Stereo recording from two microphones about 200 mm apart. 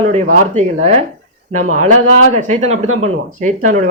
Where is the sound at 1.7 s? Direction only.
35° right (ahead or behind).